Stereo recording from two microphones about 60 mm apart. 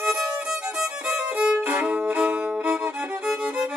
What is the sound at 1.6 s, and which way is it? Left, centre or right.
Music, right.